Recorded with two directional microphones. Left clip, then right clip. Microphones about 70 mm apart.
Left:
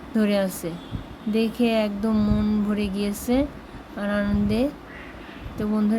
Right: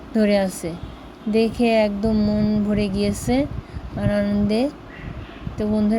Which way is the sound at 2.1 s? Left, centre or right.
Centre.